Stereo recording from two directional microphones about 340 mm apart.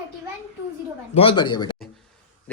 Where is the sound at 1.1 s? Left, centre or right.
Centre.